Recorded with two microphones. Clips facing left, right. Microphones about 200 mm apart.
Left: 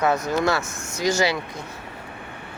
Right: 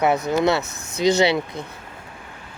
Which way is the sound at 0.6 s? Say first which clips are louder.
Right 3 dB; 60° right (ahead or behind).